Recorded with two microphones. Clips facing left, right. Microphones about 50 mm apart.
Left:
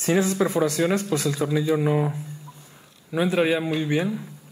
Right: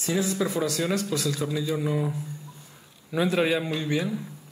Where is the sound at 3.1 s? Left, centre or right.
Centre.